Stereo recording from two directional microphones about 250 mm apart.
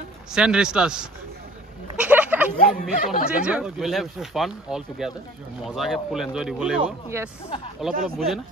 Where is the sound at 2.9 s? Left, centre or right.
Left.